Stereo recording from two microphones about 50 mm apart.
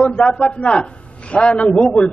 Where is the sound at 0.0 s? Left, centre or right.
Left.